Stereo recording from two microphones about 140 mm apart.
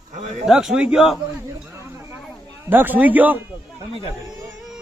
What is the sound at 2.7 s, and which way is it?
Speech, 15° right (ahead or behind).